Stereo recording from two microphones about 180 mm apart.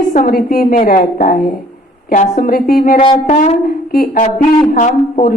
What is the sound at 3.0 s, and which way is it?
Speech, 25° left (ahead or behind).